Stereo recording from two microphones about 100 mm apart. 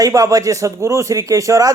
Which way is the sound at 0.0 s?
35° right (ahead or behind).